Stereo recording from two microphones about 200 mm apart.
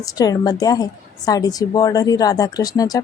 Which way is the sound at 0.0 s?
20° left (ahead or behind).